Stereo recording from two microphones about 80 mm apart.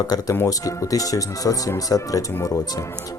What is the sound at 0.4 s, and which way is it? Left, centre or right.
Speech, left.